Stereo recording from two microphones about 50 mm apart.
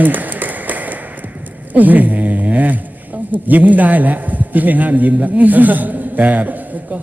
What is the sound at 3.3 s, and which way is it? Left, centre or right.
A man's voice, right.